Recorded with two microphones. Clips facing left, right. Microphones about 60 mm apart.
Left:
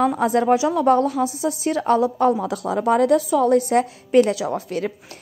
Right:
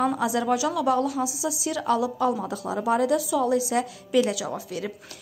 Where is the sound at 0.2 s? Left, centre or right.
Left.